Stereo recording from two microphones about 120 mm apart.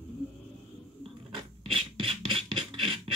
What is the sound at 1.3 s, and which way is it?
Filing, 45° right (ahead or behind).